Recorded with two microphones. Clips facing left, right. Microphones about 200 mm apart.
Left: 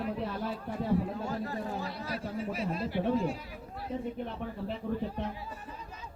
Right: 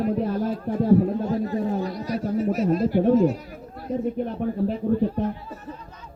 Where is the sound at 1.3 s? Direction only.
20° right (ahead or behind).